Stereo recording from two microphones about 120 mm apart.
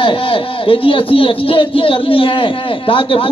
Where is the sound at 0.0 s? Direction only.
50° left (ahead or behind).